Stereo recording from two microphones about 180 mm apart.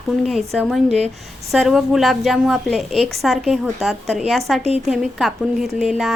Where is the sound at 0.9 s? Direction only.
35° right (ahead or behind).